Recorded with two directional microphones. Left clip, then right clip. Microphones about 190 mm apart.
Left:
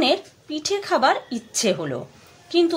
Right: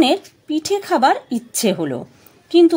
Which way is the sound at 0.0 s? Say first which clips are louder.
Right 4 dB; 45° right (ahead or behind).